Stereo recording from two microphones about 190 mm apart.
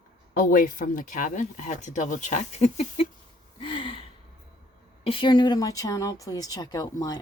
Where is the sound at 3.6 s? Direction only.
25° left (ahead or behind).